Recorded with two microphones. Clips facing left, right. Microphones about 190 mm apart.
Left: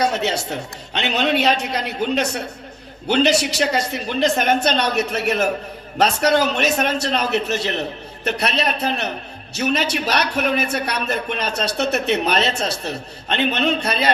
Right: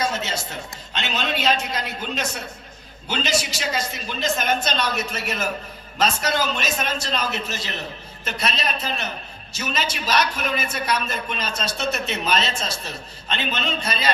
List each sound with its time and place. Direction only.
0.0 s a man's voice: 65° left (ahead or behind)